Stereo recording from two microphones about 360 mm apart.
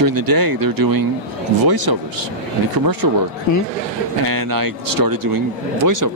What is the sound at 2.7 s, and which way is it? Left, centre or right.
Speech, right.